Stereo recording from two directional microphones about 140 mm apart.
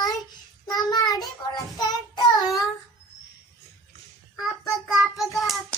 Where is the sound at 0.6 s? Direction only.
30° left (ahead or behind).